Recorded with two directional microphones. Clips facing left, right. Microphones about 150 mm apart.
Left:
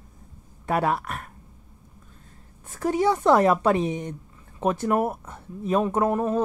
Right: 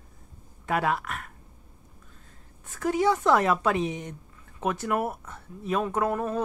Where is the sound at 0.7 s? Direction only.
35° left (ahead or behind).